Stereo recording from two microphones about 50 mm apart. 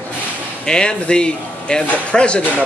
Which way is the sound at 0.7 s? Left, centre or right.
Centre.